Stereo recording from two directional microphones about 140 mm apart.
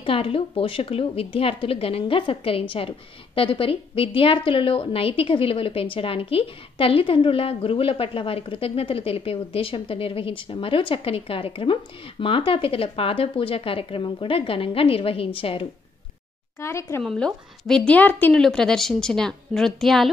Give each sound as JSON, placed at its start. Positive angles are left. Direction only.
{"t": 0.0, "sound": "a woman's voice", "side_deg": 40}
{"t": 16.5, "sound": "speech", "side_deg": 20}
{"t": 17.0, "sound": "a woman's voice", "side_deg": 5}